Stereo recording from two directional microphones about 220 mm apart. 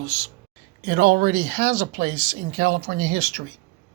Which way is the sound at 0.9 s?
40° right (ahead or behind).